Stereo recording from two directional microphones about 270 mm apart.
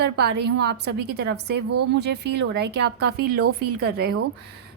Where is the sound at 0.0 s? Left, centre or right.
Right.